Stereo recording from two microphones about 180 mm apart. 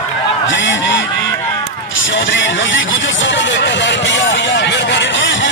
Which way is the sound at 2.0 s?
90° left.